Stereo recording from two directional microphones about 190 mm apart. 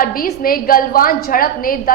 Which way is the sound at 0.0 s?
50° left (ahead or behind).